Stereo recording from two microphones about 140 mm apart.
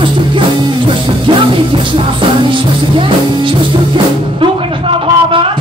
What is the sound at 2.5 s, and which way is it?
Music, 35° right (ahead or behind).